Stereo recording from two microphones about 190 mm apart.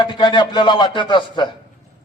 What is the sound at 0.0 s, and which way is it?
A man's voice, 25° left (ahead or behind).